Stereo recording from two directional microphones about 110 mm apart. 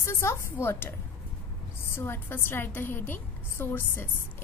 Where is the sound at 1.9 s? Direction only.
20° left (ahead or behind).